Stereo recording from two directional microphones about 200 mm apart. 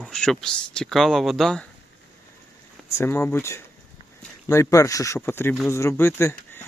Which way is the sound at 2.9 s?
10° left (ahead or behind).